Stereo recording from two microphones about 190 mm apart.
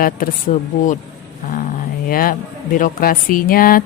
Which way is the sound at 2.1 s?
50° left (ahead or behind).